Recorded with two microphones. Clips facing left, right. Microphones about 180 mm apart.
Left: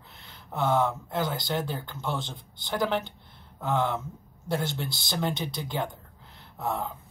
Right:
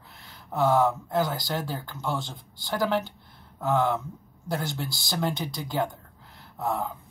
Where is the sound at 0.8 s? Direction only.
20° left (ahead or behind).